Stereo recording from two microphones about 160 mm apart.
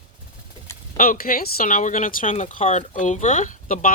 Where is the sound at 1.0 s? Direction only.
60° left (ahead or behind).